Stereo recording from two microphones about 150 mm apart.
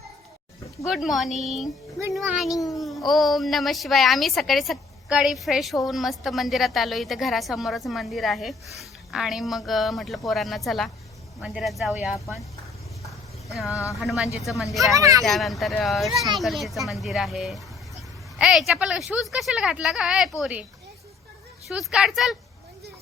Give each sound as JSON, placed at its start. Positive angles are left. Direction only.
{"t": 0.9, "sound": "a woman's voice", "side_deg": 0}
{"t": 13.7, "sound": "speech", "side_deg": 20}
{"t": 14.0, "sound": "a woman's voice", "side_deg": 0}
{"t": 14.9, "sound": "speech", "side_deg": -20}
{"t": 15.2, "sound": "a woman's voice", "side_deg": 0}
{"t": 21.7, "sound": "a woman's voice", "side_deg": 0}